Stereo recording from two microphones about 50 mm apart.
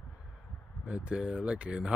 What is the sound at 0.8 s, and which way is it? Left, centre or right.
Speech, right.